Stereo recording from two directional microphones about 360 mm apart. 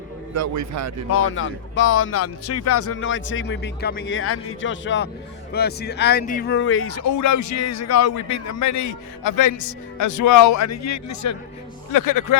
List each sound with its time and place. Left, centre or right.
0.3 s a man's voice: right
1.1 s speech: left